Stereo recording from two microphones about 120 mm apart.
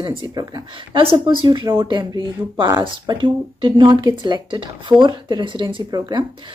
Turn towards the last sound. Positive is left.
turn(degrees=-35)  # may be behind; listen again after turning